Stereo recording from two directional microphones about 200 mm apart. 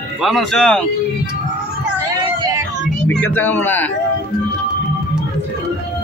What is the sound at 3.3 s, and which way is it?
Speech, 10° left (ahead or behind).